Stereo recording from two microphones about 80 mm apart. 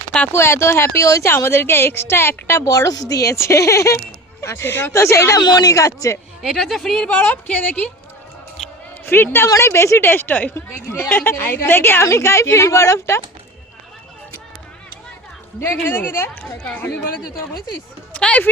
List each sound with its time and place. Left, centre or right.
0.3 s a woman's voice: left
2.6 s a woman's voice: left
5.4 s a woman's voice: left
6.4 s speech: centre
7.1 s a woman's voice: centre
9.0 s a woman's voice: left
10.7 s a woman's voice: left
15.6 s a woman's voice: left
18.1 s speech: centre